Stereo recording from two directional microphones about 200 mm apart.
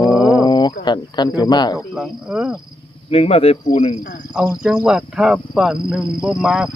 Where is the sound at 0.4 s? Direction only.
20° left (ahead or behind).